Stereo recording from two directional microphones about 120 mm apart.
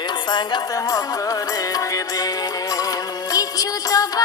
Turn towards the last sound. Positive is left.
turn(degrees=30)  # may be behind; listen again after turning